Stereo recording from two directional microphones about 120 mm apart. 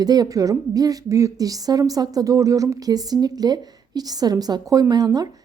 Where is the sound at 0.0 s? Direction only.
35° right (ahead or behind).